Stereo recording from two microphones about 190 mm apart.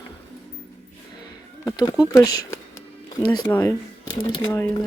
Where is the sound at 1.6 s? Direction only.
20° left (ahead or behind).